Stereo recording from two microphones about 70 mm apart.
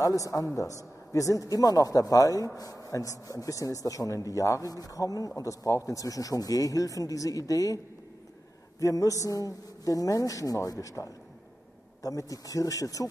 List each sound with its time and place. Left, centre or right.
0.0 s a man's voice: left